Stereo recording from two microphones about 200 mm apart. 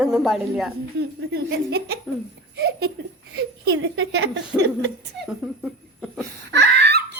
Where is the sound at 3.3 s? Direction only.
70° right (ahead or behind).